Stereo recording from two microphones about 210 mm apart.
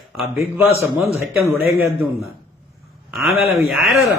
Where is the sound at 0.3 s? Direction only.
10° right (ahead or behind).